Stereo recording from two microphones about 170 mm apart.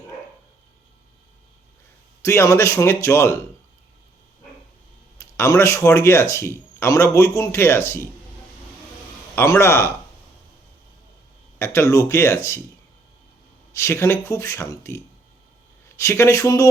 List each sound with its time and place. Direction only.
2.2 s speech: 15° left (ahead or behind)
5.2 s speech: 15° left (ahead or behind)
9.3 s speech: 15° left (ahead or behind)
11.6 s speech: 15° left (ahead or behind)
13.7 s speech: 15° left (ahead or behind)